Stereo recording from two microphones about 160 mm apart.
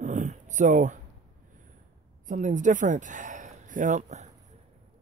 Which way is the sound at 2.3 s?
50° right (ahead or behind).